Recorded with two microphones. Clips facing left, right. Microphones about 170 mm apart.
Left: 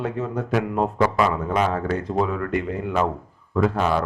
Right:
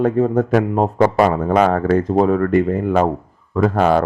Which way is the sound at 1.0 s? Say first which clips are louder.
Right 7 dB; 55° right (ahead or behind).